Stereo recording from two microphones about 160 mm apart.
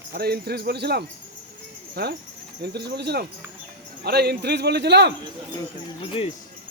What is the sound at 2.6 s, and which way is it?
Speech, 90° right.